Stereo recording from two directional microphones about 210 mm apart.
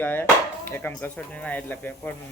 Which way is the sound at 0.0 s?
10° left (ahead or behind).